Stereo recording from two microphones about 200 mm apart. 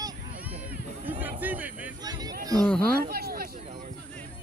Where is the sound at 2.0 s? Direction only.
20° right (ahead or behind).